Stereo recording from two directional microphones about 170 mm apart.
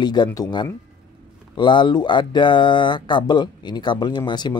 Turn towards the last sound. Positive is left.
turn(degrees=25)  # may be behind; listen again after turning